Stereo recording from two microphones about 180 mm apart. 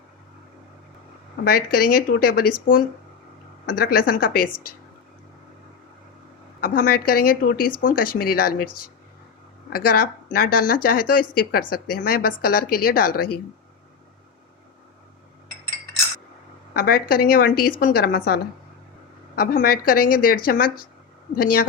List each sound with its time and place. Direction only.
1.5 s speech: 55° left (ahead or behind)
6.6 s speech: 55° left (ahead or behind)
9.6 s speech: 55° left (ahead or behind)
16.7 s speech: 55° left (ahead or behind)
19.4 s a woman's voice: 55° left (ahead or behind)